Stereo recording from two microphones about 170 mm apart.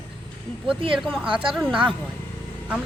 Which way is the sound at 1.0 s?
Centre (ahead or behind).